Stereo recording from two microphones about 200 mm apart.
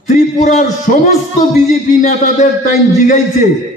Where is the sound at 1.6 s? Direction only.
40° left (ahead or behind).